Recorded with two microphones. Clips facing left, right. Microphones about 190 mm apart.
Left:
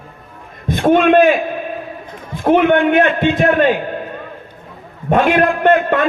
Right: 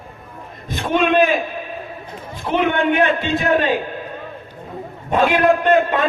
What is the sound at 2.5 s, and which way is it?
Speech, 50° left (ahead or behind).